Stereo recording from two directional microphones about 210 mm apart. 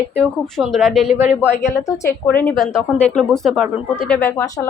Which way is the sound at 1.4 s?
15° left (ahead or behind).